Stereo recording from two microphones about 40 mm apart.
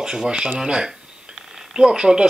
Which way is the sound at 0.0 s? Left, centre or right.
Centre.